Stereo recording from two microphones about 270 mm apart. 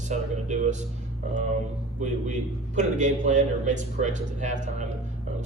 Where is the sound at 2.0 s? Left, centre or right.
Right.